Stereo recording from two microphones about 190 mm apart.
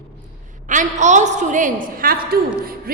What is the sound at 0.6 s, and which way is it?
A woman's voice, 40° right (ahead or behind).